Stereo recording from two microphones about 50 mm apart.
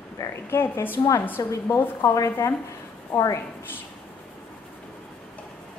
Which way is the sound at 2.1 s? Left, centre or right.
Left.